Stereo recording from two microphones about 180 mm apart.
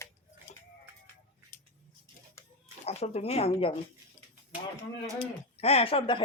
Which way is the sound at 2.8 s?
35° left (ahead or behind).